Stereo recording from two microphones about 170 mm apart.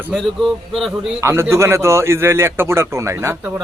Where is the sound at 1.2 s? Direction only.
15° right (ahead or behind).